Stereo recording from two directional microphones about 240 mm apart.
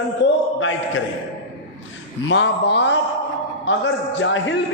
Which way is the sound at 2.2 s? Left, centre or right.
Left.